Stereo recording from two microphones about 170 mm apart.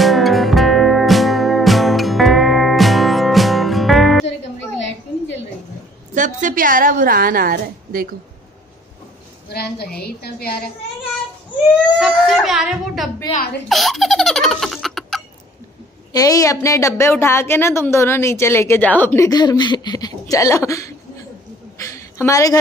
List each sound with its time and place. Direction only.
0.0 s music: centre (ahead or behind)
6.1 s a woman's voice: 50° right (ahead or behind)
9.5 s a woman's voice: 65° left (ahead or behind)
12.0 s speech: centre (ahead or behind)
13.7 s baby laughter: centre (ahead or behind)
16.1 s a woman's voice: 20° left (ahead or behind)
21.8 s a sound: 15° left (ahead or behind)